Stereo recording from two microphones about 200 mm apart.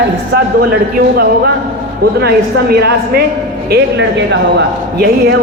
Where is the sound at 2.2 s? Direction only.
50° right (ahead or behind).